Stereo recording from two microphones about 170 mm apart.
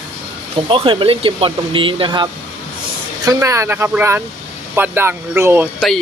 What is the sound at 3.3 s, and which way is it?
Speech, 20° right (ahead or behind).